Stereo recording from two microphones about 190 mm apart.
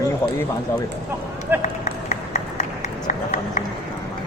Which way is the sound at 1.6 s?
35° left (ahead or behind).